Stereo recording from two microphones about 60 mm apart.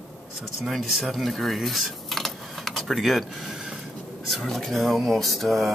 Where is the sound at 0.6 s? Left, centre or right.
Centre.